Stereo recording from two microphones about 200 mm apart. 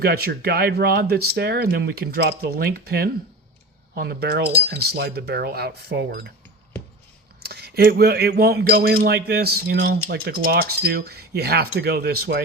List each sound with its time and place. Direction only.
0.0 s speech: 50° right (ahead or behind)
7.4 s speech: 50° right (ahead or behind)